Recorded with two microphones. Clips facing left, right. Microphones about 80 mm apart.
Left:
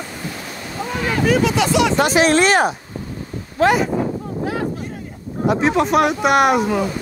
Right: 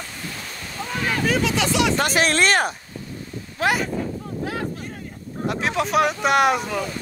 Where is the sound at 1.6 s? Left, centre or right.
Left.